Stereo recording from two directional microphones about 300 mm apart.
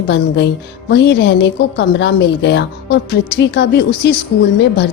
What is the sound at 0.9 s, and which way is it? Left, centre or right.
A woman's voice, left.